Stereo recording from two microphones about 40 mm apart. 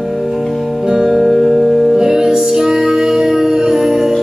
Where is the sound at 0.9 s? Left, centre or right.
Centre.